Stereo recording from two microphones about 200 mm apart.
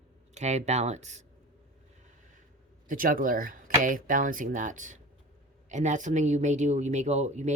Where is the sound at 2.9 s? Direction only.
45° right (ahead or behind).